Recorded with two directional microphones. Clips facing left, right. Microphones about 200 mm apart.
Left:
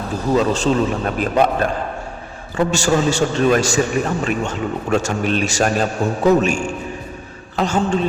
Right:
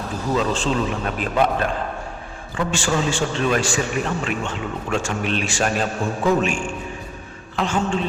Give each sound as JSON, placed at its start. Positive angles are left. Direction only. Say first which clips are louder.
{"t": 0.3, "sound": "a man's voice", "louder": "left 5 dB", "side_deg": 40}